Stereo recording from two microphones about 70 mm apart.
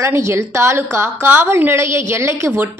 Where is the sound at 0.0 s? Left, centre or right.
Right.